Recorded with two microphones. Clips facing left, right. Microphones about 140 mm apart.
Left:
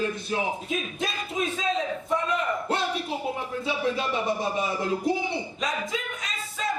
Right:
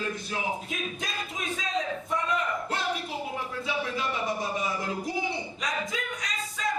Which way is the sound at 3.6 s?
25° left (ahead or behind).